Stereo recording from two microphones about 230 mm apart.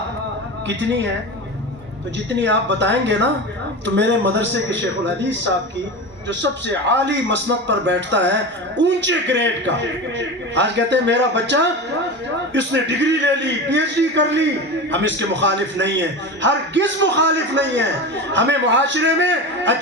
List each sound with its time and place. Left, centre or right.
0.7 s a man's voice: right
2.1 s a man's voice: right
6.2 s a man's voice: right